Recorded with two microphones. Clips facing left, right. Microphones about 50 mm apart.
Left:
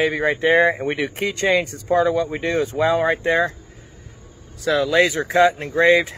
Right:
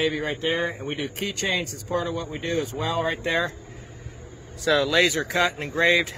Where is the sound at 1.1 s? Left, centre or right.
Left.